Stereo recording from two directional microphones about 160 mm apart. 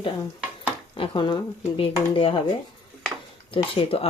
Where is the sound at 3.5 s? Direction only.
35° left (ahead or behind).